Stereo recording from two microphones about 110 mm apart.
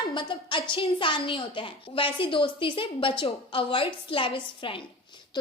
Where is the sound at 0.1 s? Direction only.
45° left (ahead or behind).